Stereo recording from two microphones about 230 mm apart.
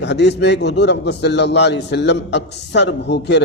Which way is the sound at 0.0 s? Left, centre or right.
Left.